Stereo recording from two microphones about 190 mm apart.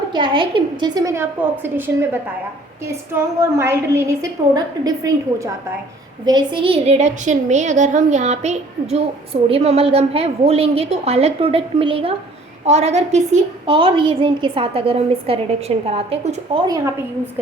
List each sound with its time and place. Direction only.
0.1 s a woman's voice: 25° right (ahead or behind)
3.6 s a woman's voice: 15° right (ahead or behind); by 16.4 s 30° right (ahead or behind)
16.6 s a woman's voice: 20° right (ahead or behind)